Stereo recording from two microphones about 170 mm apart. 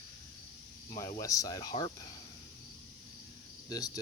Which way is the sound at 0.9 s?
20° left (ahead or behind).